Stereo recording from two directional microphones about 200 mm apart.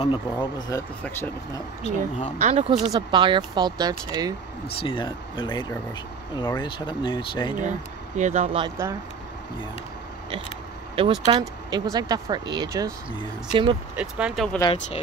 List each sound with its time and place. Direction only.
0.0 s speech: 25° left (ahead or behind)
2.3 s speech: 35° right (ahead or behind)
2.7 s speech: 20° right (ahead or behind)
4.6 s speech: 25° left (ahead or behind)
8.2 s speech: 35° right (ahead or behind)
8.6 s speech: 15° right (ahead or behind)
11.0 s speech: 20° right (ahead or behind)
13.9 s speech: 5° right (ahead or behind)
14.6 s speech: 25° left (ahead or behind)